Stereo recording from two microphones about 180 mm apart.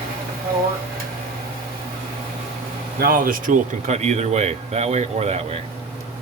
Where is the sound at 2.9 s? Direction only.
55° right (ahead or behind); by 5.6 s 35° right (ahead or behind).